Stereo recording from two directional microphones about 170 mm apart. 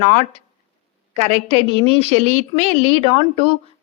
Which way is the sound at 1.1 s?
40° right (ahead or behind).